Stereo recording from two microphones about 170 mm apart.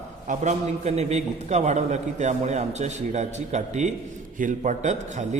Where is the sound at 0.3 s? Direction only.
40° right (ahead or behind).